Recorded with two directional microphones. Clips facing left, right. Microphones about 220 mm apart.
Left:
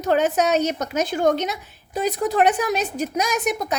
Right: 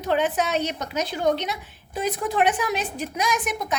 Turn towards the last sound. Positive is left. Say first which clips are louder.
# left 3 dB
turn(degrees=40)  # may be behind; listen again after turning